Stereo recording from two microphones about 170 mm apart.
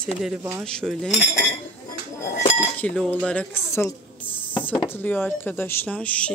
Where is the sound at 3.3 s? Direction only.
10° left (ahead or behind).